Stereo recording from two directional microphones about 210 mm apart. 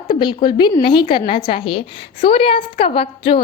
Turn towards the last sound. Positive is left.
turn(degrees=25)  # may be behind; listen again after turning